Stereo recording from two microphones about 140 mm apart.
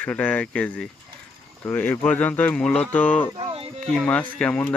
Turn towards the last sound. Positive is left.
turn(degrees=10)  # may be behind; listen again after turning